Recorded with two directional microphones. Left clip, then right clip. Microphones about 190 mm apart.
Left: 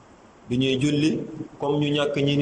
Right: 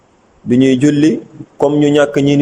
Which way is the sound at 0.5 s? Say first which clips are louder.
Right 12 dB; 45° right (ahead or behind).